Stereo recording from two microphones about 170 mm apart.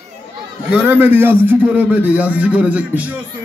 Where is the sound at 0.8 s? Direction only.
10° right (ahead or behind).